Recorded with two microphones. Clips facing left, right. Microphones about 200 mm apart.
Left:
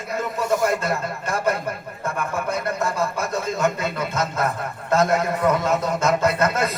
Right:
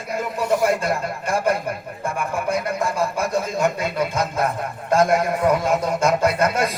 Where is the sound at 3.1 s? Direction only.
10° right (ahead or behind).